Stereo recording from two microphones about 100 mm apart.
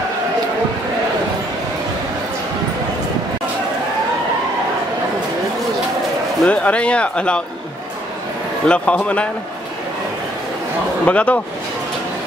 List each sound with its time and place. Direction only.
6.4 s speech: 10° left (ahead or behind)
8.6 s speech: 10° left (ahead or behind)
11.1 s speech: 15° left (ahead or behind)